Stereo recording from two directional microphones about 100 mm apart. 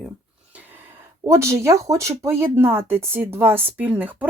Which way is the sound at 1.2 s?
30° right (ahead or behind).